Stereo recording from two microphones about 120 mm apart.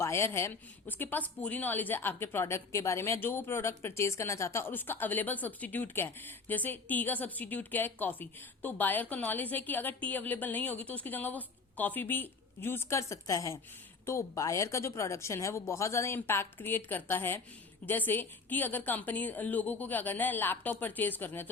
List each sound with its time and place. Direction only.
0.0 s a woman's voice: 20° left (ahead or behind)